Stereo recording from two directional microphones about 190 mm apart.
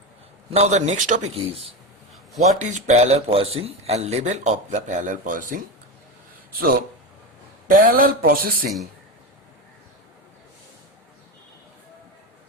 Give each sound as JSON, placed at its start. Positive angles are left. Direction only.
{"t": 0.5, "sound": "a man's voice", "side_deg": -35}